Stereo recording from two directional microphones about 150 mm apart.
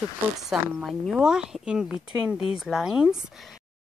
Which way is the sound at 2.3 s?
35° left (ahead or behind).